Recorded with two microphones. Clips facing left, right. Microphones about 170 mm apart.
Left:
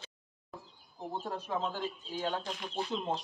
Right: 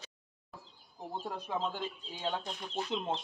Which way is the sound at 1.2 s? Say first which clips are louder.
Even; 15° right (ahead or behind).